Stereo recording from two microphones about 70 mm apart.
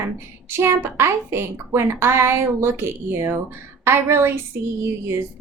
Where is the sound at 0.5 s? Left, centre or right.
Right.